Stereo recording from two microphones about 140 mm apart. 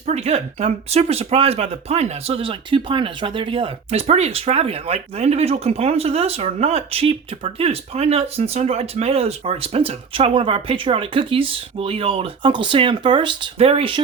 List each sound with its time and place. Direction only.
0.0 s speech: 50° right (ahead or behind)